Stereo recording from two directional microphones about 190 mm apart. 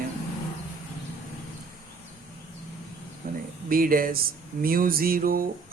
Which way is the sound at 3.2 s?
50° right (ahead or behind).